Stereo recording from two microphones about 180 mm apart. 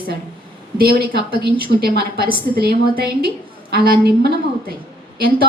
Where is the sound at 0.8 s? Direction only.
60° right (ahead or behind).